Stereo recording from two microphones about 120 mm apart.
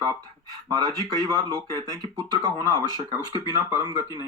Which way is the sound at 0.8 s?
30° left (ahead or behind).